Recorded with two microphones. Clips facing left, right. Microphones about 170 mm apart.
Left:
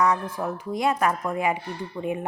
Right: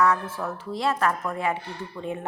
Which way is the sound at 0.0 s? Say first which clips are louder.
Even; 15° left (ahead or behind).